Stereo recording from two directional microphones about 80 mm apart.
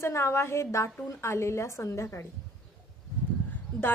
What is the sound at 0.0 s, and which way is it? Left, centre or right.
A woman's voice, left.